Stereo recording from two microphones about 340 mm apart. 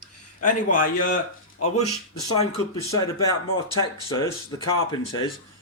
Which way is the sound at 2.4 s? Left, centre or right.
Centre.